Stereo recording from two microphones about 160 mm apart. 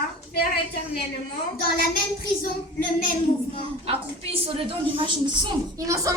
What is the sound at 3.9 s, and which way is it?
A woman's voice, 35° right (ahead or behind).